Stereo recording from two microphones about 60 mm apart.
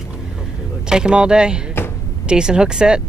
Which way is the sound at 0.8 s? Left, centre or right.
Centre.